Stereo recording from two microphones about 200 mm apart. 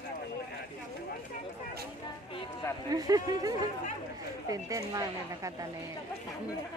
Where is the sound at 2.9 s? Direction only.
20° right (ahead or behind).